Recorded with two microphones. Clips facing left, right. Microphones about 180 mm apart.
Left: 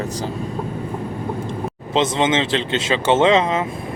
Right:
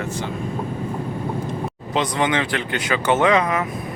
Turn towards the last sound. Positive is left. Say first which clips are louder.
# left 2 dB
turn(degrees=25)  # may be behind; listen again after turning